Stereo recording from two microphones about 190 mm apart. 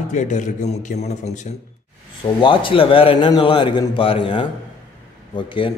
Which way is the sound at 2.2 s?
25° left (ahead or behind).